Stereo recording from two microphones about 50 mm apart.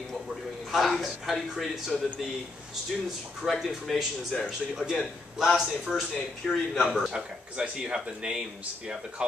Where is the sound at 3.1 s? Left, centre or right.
Centre.